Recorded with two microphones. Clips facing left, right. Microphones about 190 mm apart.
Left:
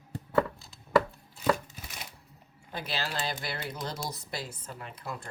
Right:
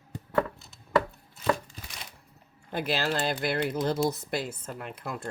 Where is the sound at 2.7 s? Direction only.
50° right (ahead or behind).